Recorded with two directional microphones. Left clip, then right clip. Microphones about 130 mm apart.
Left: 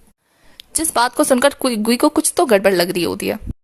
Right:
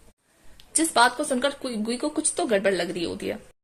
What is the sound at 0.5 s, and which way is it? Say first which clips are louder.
Speech: left 3 dB; 45° left (ahead or behind).